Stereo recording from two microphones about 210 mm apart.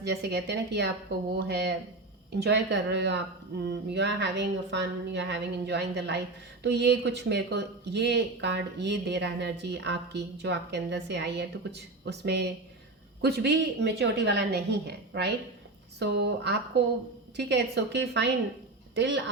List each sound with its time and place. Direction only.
0.0 s a woman's voice: 55° right (ahead or behind)